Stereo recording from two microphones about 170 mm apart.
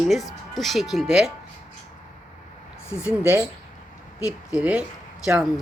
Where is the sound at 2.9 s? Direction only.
15° left (ahead or behind).